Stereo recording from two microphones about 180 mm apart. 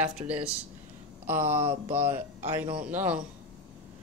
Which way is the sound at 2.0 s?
40° right (ahead or behind).